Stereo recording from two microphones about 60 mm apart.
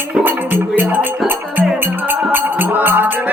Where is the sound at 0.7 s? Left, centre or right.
Right.